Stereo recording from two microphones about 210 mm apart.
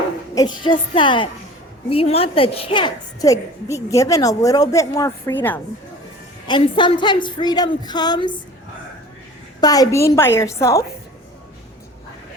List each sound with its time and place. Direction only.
0.3 s a woman's voice: 20° left (ahead or behind)
6.5 s a woman's voice: 20° left (ahead or behind)
9.6 s a woman's voice: 15° left (ahead or behind)